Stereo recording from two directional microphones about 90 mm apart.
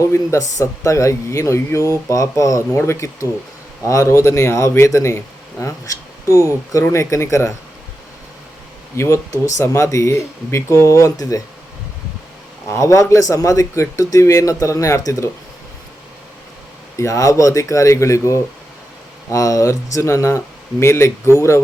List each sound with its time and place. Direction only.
0.0 s speech: 35° left (ahead or behind)
9.0 s speech: 30° left (ahead or behind)
12.6 s speech: 35° left (ahead or behind)
17.0 s speech: 35° left (ahead or behind)